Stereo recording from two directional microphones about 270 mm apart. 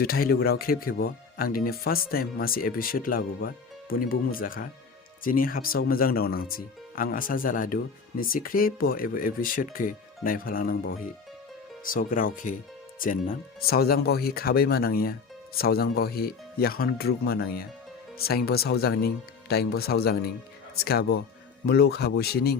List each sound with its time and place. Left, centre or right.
0.0 s speech: left
11.9 s speech: left